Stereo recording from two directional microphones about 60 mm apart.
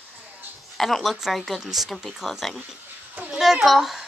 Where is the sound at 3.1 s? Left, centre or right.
Right.